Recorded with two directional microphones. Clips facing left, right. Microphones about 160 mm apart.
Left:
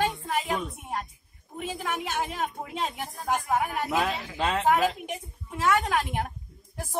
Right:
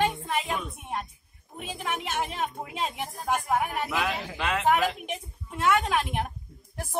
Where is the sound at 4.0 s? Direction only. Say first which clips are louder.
Left 4 dB; 30° left (ahead or behind).